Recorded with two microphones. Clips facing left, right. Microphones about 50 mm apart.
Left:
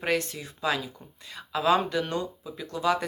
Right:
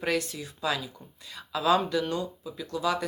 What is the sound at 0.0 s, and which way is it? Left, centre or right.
Speech, left.